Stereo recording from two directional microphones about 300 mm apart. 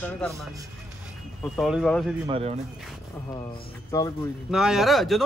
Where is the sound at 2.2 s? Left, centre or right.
Centre.